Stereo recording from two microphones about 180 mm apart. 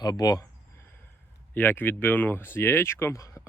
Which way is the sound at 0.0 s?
20° left (ahead or behind).